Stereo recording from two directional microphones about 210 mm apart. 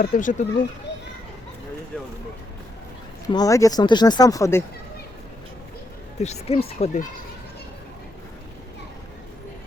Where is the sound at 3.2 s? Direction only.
15° left (ahead or behind).